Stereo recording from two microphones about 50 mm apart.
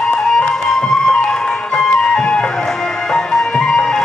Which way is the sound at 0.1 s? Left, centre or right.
Centre.